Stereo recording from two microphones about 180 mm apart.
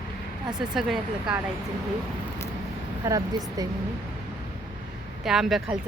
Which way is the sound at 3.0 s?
15° right (ahead or behind).